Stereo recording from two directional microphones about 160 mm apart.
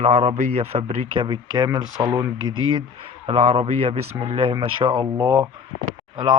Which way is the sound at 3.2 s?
40° right (ahead or behind).